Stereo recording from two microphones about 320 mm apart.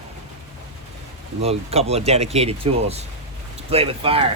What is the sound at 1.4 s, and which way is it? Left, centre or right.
Speech, centre.